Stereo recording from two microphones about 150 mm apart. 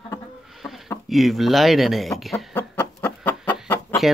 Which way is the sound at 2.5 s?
10° left (ahead or behind).